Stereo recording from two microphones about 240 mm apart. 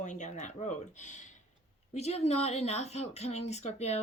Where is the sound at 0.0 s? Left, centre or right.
Left.